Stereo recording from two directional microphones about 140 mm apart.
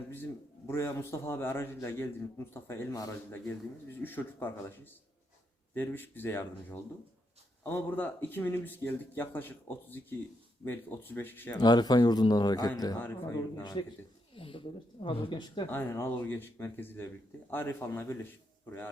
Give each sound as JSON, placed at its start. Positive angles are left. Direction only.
{"t": 0.7, "sound": "speech", "side_deg": 15}
{"t": 3.2, "sound": "speech", "side_deg": 15}
{"t": 11.6, "sound": "speech", "side_deg": 30}
{"t": 13.0, "sound": "speech", "side_deg": 15}
{"t": 13.6, "sound": "speech", "side_deg": 30}
{"t": 14.3, "sound": "speech", "side_deg": 40}
{"t": 15.7, "sound": "speech", "side_deg": 15}